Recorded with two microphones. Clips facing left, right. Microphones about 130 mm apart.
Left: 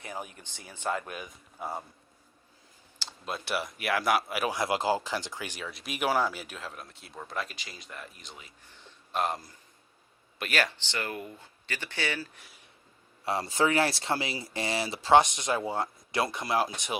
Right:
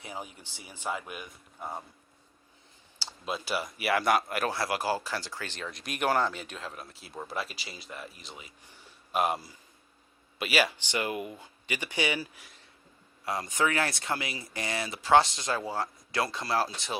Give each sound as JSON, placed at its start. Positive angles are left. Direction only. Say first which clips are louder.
{"t": 0.5, "sound": "speech", "louder": "left 3 dB", "side_deg": -15}
{"t": 3.2, "sound": "speech", "louder": "even", "side_deg": 0}
{"t": 4.5, "sound": "speech", "louder": "left 2 dB", "side_deg": 20}
{"t": 13.2, "sound": "speech", "louder": "left 2 dB", "side_deg": 30}